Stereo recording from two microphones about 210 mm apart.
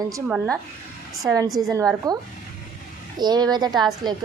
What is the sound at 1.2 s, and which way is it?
Speech, 15° right (ahead or behind).